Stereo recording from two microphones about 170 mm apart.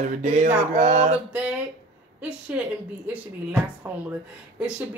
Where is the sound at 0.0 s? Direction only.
45° right (ahead or behind).